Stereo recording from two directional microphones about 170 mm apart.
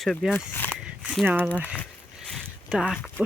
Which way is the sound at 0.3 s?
10° left (ahead or behind).